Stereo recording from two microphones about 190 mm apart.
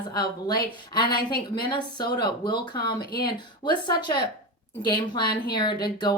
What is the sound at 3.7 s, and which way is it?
Speech, 25° left (ahead or behind).